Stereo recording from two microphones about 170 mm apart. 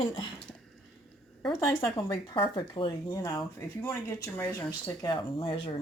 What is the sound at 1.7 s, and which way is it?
Speech, 20° left (ahead or behind).